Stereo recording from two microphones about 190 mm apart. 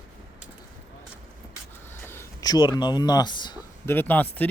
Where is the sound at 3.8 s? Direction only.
10° left (ahead or behind).